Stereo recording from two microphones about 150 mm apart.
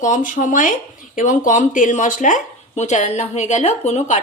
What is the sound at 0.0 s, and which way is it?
A woman's voice, 60° left (ahead or behind).